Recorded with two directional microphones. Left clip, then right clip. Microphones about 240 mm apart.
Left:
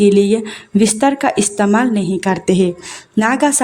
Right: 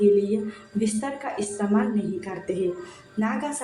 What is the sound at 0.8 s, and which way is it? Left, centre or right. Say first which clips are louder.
Speech: left 15 dB; left.